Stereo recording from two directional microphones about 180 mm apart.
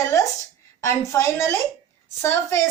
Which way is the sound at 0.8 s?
15° left (ahead or behind).